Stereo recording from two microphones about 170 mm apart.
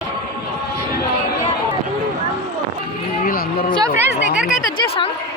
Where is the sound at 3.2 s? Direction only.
55° left (ahead or behind).